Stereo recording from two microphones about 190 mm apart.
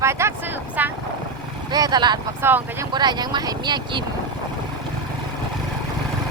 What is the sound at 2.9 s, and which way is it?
Speech, 20° right (ahead or behind).